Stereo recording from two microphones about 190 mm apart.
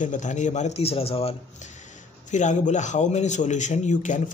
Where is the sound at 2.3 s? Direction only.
40° left (ahead or behind).